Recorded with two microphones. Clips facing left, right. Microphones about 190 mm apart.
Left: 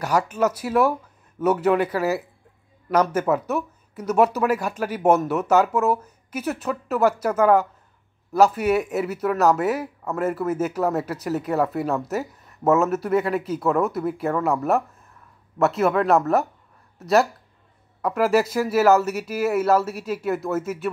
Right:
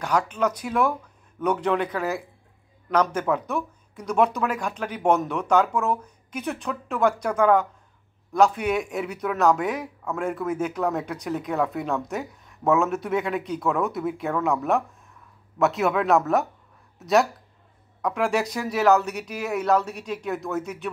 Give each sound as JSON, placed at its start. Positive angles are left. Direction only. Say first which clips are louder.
{"t": 0.0, "sound": "speech", "louder": "left 2 dB", "side_deg": 5}